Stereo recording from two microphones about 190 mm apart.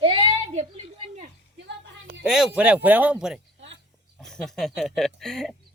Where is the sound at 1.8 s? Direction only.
60° right (ahead or behind).